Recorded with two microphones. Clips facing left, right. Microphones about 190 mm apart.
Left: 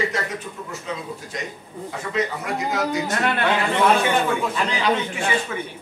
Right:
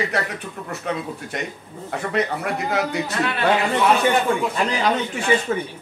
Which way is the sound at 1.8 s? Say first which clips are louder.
Right 2 dB; 60° right (ahead or behind).